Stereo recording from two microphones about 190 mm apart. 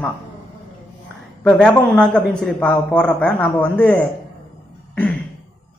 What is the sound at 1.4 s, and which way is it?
A woman's voice, 5° left (ahead or behind).